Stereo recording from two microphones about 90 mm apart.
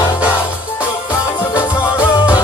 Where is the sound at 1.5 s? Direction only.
30° left (ahead or behind).